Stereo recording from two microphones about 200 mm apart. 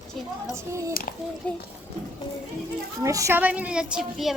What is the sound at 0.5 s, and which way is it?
Speech, 15° right (ahead or behind).